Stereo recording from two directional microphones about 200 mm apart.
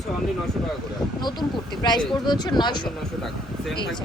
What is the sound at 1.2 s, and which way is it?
Speech, 20° left (ahead or behind).